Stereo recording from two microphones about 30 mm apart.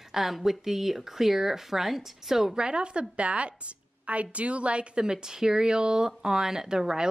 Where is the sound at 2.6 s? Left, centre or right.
Right.